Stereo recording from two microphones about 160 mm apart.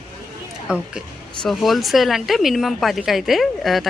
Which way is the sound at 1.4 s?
Centre (ahead or behind).